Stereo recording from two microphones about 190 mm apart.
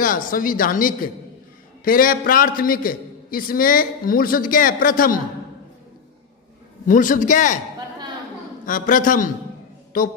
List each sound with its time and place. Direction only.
0.3 s a man's voice: 45° left (ahead or behind)
6.9 s a man's voice: 45° left (ahead or behind)
8.6 s a man's voice: 45° left (ahead or behind)